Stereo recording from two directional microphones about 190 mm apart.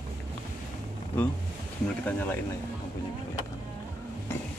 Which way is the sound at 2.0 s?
10° left (ahead or behind).